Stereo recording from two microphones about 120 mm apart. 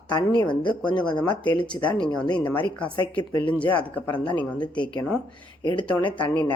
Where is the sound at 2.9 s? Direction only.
40° left (ahead or behind).